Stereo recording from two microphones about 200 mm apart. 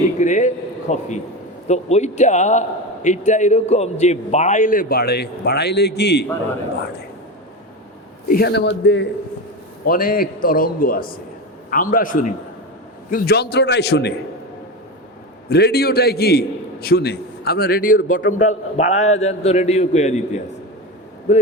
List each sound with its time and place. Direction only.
0.2 s a man's voice: 35° left (ahead or behind); by 6.2 s 55° left (ahead or behind)
8.3 s a man's voice: 55° left (ahead or behind)
9.8 s a man's voice: 45° left (ahead or behind)
15.4 s a man's voice: 55° left (ahead or behind); by 20.4 s 35° left (ahead or behind)